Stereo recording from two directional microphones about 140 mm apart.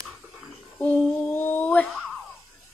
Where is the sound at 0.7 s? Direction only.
10° left (ahead or behind).